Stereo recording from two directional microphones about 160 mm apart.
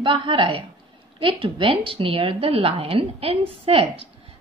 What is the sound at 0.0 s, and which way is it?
A woman's voice, 30° right (ahead or behind).